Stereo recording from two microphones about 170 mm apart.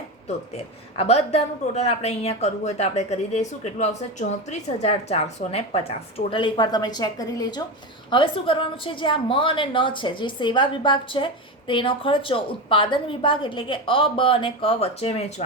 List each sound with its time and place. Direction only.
0.5 s a woman's voice: 35° left (ahead or behind)